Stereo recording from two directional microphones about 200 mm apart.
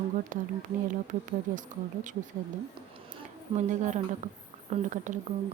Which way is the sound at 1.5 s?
40° right (ahead or behind).